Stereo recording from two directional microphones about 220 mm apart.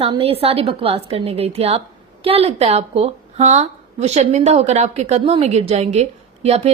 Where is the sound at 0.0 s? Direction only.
25° right (ahead or behind).